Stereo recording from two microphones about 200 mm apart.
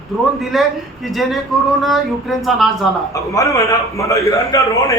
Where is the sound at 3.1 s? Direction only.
15° left (ahead or behind).